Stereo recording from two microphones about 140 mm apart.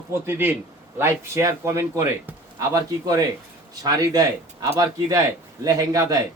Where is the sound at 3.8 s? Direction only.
25° right (ahead or behind).